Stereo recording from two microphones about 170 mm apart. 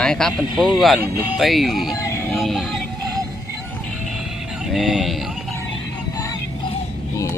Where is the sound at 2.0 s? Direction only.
15° left (ahead or behind).